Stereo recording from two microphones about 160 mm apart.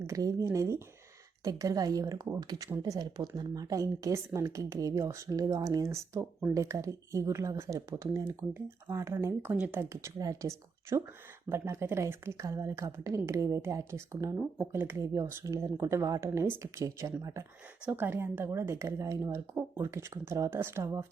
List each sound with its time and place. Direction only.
0.1 s a woman's voice: 20° right (ahead or behind)